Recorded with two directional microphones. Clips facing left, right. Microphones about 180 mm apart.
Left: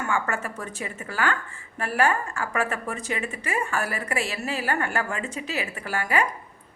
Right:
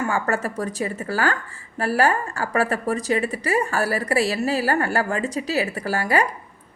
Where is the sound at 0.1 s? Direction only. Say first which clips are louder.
Right 4 dB; 40° right (ahead or behind).